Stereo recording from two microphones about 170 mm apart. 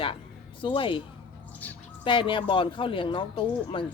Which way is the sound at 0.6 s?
30° left (ahead or behind).